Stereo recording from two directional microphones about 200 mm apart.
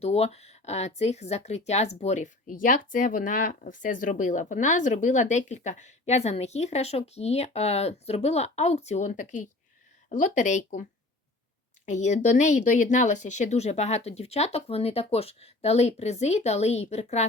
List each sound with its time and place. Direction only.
0.0 s speech: 30° left (ahead or behind)
11.9 s speech: 35° left (ahead or behind)